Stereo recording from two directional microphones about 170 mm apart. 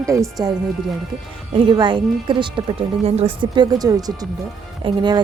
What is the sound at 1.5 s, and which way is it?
Speech, 30° right (ahead or behind).